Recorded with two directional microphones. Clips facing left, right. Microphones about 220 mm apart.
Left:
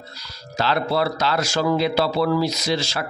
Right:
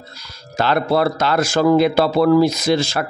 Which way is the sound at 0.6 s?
50° right (ahead or behind).